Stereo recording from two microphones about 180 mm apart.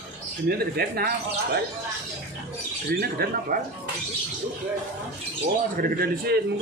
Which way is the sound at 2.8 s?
60° right (ahead or behind).